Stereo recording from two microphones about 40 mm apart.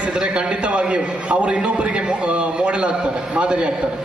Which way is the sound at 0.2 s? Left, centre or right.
Right.